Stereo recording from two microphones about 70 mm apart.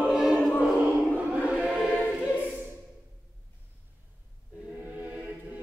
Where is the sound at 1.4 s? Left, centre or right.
Centre.